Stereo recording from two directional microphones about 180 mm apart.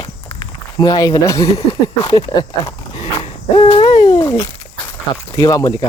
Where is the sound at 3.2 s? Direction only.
30° left (ahead or behind).